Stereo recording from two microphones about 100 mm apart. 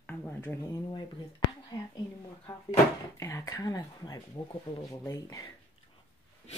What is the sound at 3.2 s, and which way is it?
Speech, 30° left (ahead or behind).